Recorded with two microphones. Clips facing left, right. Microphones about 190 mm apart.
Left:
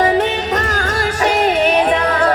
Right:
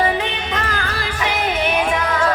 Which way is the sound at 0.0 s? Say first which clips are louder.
Left 6 dB; 40° left (ahead or behind).